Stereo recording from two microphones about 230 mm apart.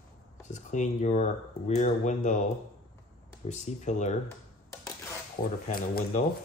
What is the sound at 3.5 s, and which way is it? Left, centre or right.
Speech, left.